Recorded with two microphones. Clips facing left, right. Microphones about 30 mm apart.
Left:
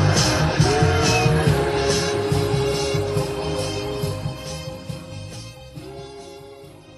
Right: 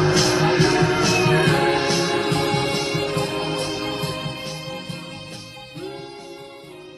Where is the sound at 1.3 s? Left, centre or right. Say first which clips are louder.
Right 3 dB; right.